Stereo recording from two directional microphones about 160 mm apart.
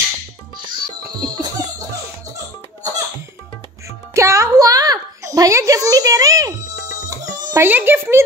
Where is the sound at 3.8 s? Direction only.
20° right (ahead or behind).